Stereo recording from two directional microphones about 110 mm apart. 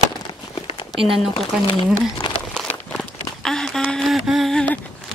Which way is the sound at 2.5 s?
5° left (ahead or behind).